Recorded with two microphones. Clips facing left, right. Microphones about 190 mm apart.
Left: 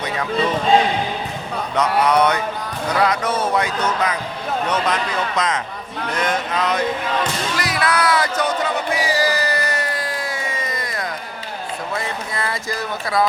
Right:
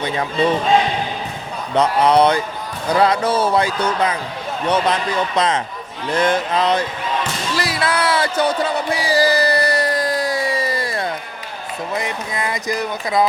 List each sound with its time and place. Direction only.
0.0 s speech: 30° right (ahead or behind)
1.7 s speech: 30° right (ahead or behind)
5.4 s speech: 30° right (ahead or behind)
7.5 s a sound: 30° right (ahead or behind)
11.9 s speech: 15° right (ahead or behind)